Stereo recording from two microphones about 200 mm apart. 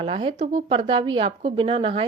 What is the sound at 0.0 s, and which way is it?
Speech, 30° right (ahead or behind).